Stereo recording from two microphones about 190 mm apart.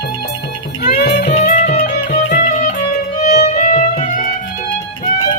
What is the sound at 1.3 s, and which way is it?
Music, 35° left (ahead or behind).